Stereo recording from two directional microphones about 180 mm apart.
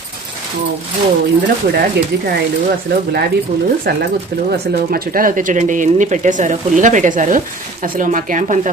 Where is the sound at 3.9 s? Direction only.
60° right (ahead or behind).